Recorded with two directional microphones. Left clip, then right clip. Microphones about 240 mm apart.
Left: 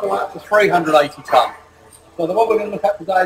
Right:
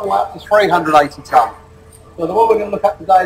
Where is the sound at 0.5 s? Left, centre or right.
Centre.